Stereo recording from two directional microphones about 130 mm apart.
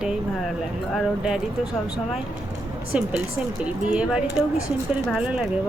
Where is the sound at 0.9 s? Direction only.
5° right (ahead or behind).